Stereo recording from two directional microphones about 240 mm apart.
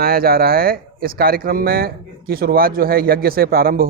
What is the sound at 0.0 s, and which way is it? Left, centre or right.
Speech, right.